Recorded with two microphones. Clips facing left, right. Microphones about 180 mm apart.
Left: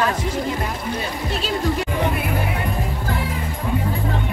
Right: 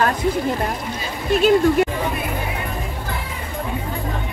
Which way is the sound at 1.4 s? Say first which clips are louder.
Right 9 dB; 55° right (ahead or behind).